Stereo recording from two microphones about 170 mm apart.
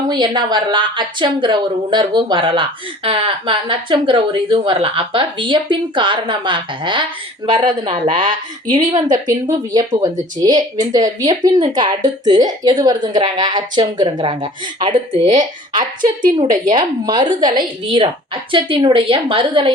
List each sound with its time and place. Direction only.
0.1 s a woman's voice: 25° right (ahead or behind)
10.0 s a woman's voice: 20° right (ahead or behind)
15.8 s a woman's voice: 55° right (ahead or behind)
16.7 s a woman's voice: 25° right (ahead or behind)